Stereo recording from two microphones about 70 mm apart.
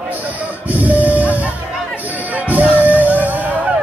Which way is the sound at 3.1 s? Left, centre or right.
Right.